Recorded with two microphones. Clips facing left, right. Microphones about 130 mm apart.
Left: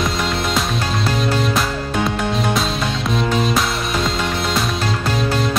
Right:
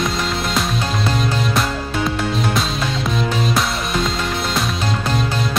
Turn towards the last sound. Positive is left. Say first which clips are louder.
# left 2 dB
turn(degrees=0)  # may be behind; listen again after turning